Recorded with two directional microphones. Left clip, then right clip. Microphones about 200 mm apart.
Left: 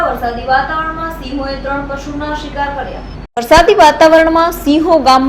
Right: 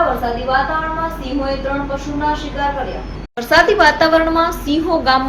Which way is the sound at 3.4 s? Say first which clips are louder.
Left 5 dB; 35° left (ahead or behind).